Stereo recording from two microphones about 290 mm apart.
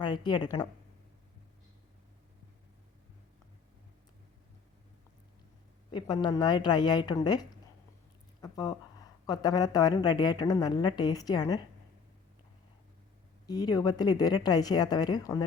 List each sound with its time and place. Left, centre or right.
0.0 s a woman's voice: centre
5.9 s a woman's voice: centre
13.5 s a woman's voice: centre